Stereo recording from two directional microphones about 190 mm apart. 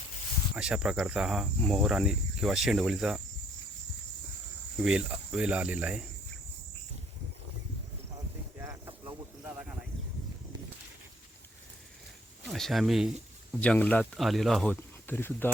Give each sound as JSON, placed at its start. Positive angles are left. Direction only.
{"t": 0.5, "sound": "speech", "side_deg": -5}
{"t": 4.8, "sound": "speech", "side_deg": -5}
{"t": 8.1, "sound": "cricket", "side_deg": -15}
{"t": 12.5, "sound": "speech", "side_deg": 0}